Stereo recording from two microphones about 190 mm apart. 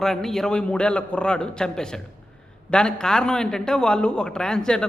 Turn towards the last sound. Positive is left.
turn(degrees=5)  # may be behind; listen again after turning